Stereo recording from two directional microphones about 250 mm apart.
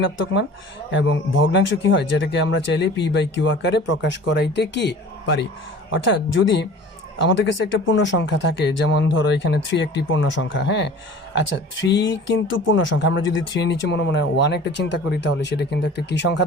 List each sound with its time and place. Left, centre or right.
0.9 s speech: left